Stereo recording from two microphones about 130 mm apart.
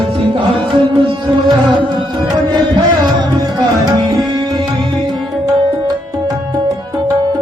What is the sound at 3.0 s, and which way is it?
Music, 35° right (ahead or behind).